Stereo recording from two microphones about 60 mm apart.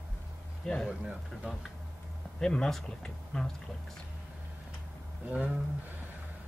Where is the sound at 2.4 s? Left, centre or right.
Centre.